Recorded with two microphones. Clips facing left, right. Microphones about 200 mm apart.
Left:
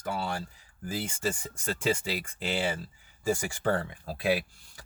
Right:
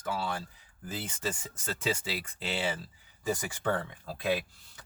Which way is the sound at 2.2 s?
5° left (ahead or behind).